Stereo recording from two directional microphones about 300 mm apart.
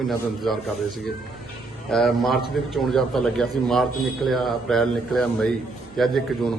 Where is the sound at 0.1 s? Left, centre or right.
Centre.